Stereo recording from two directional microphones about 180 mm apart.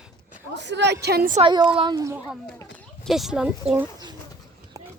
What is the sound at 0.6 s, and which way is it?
Speech, 75° right (ahead or behind).